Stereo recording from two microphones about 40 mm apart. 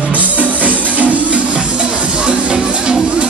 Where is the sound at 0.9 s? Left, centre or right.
Right.